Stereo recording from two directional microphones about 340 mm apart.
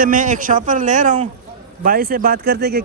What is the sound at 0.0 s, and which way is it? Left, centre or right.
Speech, right.